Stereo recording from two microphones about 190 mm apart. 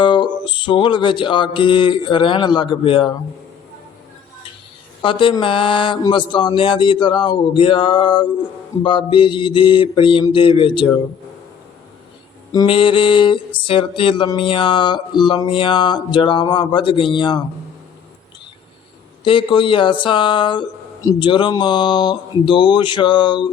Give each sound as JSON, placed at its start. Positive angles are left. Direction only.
{"t": 0.0, "sound": "mantra", "side_deg": 25}
{"t": 5.0, "sound": "mantra", "side_deg": 25}
{"t": 12.5, "sound": "mantra", "side_deg": 25}
{"t": 19.2, "sound": "mantra", "side_deg": 25}